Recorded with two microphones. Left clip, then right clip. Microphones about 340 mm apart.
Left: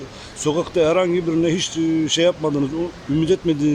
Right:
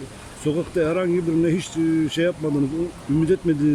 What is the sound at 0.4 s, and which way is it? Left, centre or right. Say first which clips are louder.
Speech: left 4 dB; centre.